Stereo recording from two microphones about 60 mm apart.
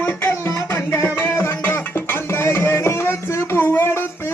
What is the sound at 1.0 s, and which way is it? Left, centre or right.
Music, left.